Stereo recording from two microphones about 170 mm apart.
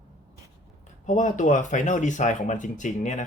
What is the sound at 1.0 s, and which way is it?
Speech, 50° left (ahead or behind).